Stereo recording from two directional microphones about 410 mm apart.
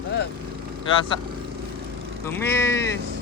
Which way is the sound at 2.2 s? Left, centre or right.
Centre.